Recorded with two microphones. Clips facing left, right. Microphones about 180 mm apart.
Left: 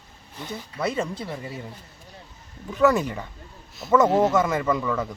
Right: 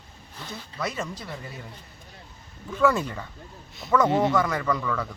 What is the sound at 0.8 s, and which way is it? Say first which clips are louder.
Speech: left 5 dB; 30° left (ahead or behind).